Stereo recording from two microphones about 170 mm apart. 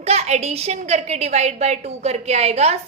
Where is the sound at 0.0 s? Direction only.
40° right (ahead or behind).